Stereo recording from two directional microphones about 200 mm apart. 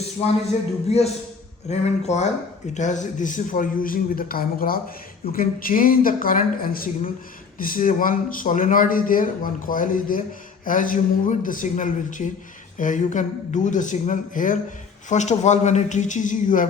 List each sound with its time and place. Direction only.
0.9 s speech: 30° left (ahead or behind)